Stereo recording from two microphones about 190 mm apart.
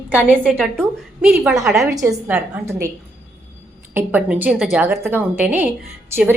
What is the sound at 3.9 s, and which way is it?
A woman's voice, 10° right (ahead or behind).